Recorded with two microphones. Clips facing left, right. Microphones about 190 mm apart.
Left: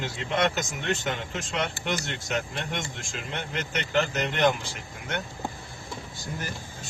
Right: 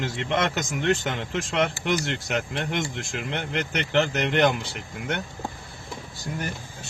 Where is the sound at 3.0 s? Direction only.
65° right (ahead or behind).